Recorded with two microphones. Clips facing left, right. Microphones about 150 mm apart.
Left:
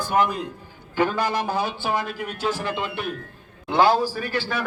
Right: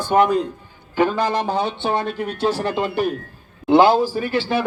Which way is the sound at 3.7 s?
25° right (ahead or behind).